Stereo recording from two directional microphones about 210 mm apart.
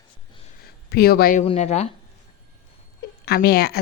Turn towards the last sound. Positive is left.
turn(degrees=50)  # may be behind; listen again after turning